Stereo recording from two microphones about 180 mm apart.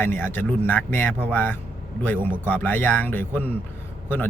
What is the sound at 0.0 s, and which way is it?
Speech, 10° left (ahead or behind).